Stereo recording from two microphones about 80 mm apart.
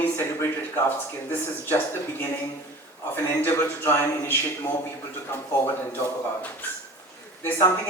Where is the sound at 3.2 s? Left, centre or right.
Left.